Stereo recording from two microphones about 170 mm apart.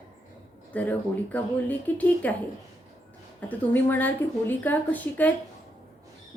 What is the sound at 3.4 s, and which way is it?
Speech, 10° left (ahead or behind).